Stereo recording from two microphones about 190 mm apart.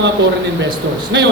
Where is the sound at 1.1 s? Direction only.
70° right (ahead or behind).